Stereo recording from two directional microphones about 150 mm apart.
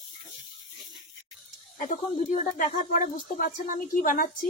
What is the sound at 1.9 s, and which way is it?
Speech, 60° left (ahead or behind).